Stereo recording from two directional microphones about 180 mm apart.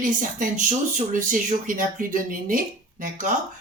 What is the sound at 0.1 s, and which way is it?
Speech, 45° right (ahead or behind).